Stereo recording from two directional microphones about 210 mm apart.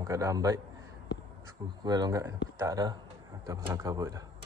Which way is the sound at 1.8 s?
20° right (ahead or behind).